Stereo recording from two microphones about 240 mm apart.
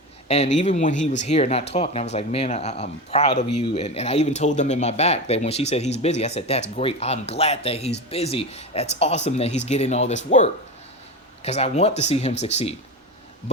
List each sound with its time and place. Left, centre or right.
0.3 s speech: left